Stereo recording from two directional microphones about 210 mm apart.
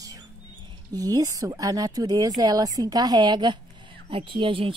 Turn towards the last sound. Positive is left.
turn(degrees=-25)  # may be behind; listen again after turning